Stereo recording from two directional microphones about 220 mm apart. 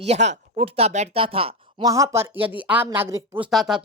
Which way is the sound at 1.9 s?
15° right (ahead or behind).